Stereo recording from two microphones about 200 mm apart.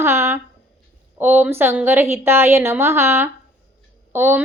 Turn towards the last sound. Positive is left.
turn(degrees=-10)  # may be behind; listen again after turning